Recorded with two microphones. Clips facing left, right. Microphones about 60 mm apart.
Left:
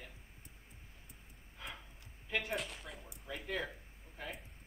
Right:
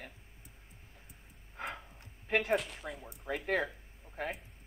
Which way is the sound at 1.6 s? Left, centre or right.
Right.